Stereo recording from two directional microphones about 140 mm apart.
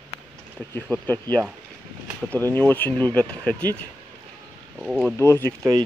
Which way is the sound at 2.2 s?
15° left (ahead or behind).